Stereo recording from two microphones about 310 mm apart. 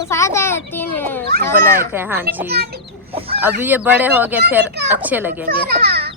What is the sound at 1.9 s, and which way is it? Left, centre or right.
Speech, centre.